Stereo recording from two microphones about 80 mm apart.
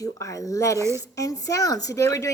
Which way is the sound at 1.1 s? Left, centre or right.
Left.